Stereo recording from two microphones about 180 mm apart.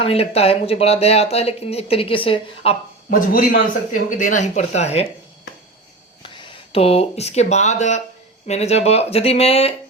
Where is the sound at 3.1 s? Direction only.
50° left (ahead or behind).